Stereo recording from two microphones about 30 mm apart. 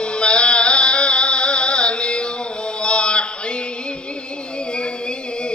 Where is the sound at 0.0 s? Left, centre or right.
Left.